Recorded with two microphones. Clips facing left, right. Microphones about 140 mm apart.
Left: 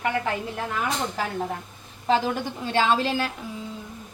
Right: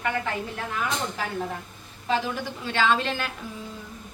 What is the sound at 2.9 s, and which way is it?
Speech, 30° left (ahead or behind).